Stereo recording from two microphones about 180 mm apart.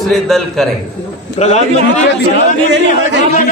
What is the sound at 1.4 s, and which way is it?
Speech, 40° left (ahead or behind).